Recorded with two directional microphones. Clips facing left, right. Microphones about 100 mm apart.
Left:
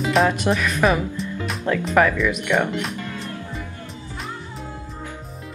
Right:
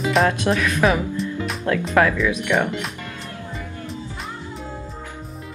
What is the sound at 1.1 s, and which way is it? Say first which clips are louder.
Speech: right 2 dB; centre (ahead or behind).